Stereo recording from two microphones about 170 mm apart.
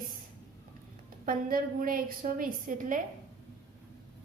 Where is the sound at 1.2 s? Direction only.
55° right (ahead or behind).